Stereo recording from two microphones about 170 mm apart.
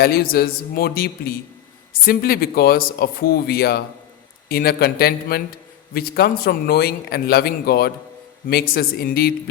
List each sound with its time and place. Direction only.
0.0 s a man's voice: 65° left (ahead or behind)